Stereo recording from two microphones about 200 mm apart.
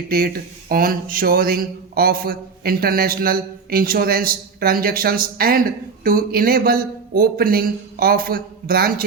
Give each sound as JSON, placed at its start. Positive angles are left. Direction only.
{"t": 0.1, "sound": "speech", "side_deg": -50}